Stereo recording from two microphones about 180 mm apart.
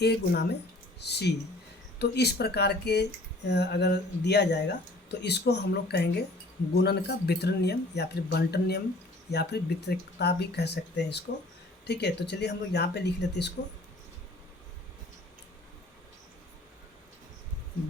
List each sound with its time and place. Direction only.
0.0 s speech: 65° left (ahead or behind)